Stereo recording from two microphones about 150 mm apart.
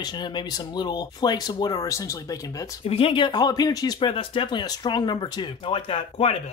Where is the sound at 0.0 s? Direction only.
30° left (ahead or behind).